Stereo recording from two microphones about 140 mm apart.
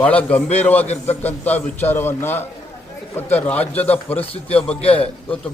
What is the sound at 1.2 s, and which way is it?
A man's voice, 15° left (ahead or behind).